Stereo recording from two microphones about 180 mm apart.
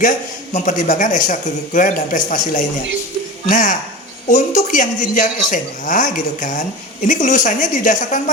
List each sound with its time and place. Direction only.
0.5 s a man's voice: 45° left (ahead or behind)